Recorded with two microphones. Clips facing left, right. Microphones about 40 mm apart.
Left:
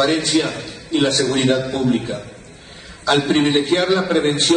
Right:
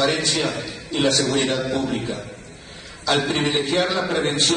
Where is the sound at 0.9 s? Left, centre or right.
Left.